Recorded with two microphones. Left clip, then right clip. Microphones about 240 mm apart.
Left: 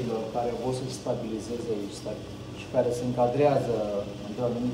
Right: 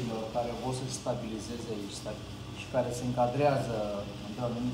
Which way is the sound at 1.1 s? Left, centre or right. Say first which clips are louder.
Left 4 dB; right.